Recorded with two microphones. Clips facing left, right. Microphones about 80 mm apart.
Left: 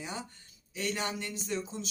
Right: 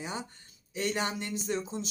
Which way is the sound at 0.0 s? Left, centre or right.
Right.